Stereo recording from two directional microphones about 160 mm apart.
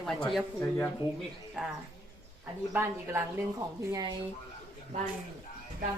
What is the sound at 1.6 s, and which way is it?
A woman's voice, 10° right (ahead or behind).